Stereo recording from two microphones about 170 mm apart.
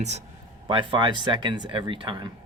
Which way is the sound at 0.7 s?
30° right (ahead or behind).